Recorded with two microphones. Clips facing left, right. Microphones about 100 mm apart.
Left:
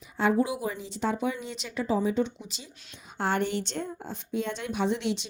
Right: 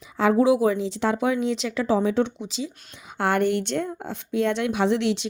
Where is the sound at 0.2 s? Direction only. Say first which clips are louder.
Right 7 dB; 90° right.